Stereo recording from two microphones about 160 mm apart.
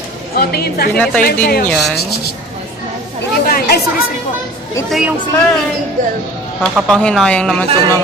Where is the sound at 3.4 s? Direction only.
75° left (ahead or behind).